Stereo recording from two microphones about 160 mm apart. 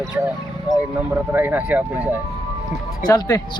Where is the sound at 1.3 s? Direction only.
10° right (ahead or behind).